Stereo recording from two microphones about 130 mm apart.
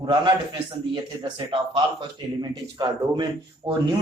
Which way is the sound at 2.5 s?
35° right (ahead or behind).